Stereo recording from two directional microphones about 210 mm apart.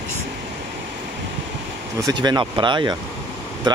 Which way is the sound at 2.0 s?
20° right (ahead or behind).